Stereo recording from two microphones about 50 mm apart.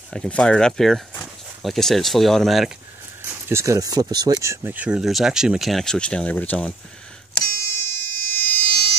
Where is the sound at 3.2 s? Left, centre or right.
Right.